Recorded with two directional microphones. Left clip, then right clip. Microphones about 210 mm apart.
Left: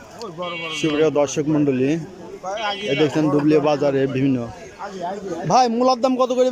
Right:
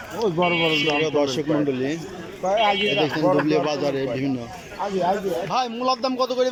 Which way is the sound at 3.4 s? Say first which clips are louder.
Left 4 dB; 15° left (ahead or behind).